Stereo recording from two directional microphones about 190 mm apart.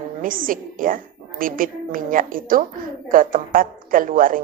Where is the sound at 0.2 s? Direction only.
45° right (ahead or behind).